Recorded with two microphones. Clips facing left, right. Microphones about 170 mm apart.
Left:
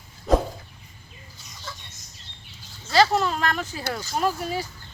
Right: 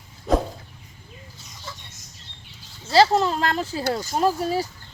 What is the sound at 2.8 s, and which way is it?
Speech, 30° right (ahead or behind).